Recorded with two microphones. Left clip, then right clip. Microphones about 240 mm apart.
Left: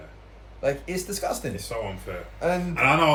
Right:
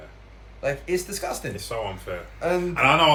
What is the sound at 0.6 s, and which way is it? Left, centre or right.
Speech, centre.